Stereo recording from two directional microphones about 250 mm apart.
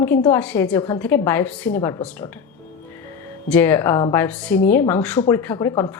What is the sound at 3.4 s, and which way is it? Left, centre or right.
A woman's voice, centre.